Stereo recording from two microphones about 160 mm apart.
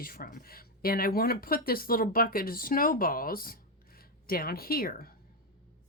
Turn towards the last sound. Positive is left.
turn(degrees=65)  # may be behind; listen again after turning